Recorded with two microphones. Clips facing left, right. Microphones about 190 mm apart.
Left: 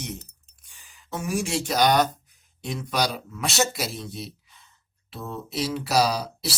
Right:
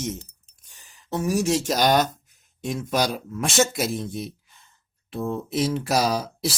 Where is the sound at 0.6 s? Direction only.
40° right (ahead or behind).